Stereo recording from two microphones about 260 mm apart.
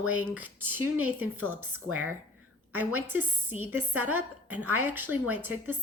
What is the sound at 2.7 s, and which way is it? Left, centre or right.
Speech, centre.